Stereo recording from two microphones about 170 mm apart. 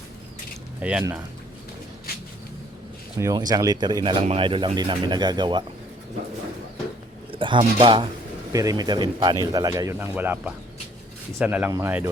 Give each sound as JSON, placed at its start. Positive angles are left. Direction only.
{"t": 0.8, "sound": "speech", "side_deg": -5}
{"t": 3.2, "sound": "speech", "side_deg": -20}
{"t": 7.3, "sound": "a sound", "side_deg": -30}
{"t": 7.6, "sound": "speech", "side_deg": -30}